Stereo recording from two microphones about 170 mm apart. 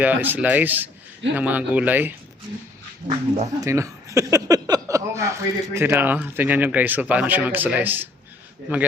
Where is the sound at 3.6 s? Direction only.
20° right (ahead or behind).